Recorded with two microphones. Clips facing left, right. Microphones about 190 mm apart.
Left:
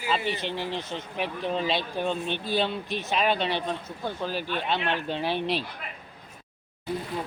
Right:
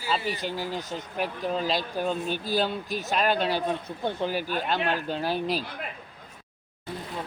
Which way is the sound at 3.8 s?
15° right (ahead or behind).